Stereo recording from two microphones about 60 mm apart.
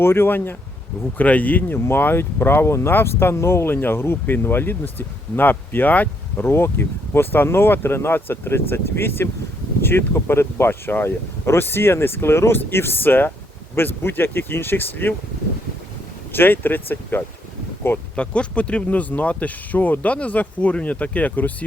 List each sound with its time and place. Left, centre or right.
0.0 s speech: left
1.2 s speech: left
6.4 s speech: left
16.3 s speech: left
18.2 s speech: centre